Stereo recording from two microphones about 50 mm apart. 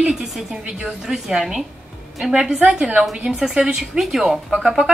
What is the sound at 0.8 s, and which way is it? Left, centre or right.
A woman's voice, centre.